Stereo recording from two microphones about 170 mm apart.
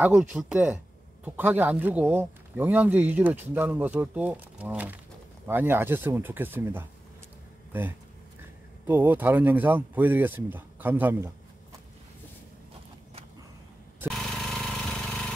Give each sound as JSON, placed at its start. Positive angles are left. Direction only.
{"t": 0.0, "sound": "speech", "side_deg": -5}
{"t": 8.8, "sound": "speech", "side_deg": -10}
{"t": 14.0, "sound": "a sound", "side_deg": 0}